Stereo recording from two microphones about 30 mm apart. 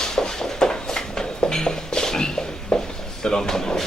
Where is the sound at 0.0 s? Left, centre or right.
Left.